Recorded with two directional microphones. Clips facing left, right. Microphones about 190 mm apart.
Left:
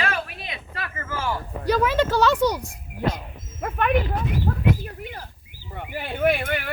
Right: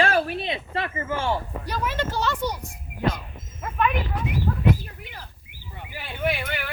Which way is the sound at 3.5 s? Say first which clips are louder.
Right 1 dB; 60° left (ahead or behind).